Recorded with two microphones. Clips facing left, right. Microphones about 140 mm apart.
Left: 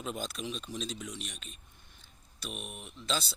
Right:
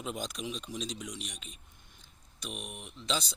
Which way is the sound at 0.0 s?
15° right (ahead or behind).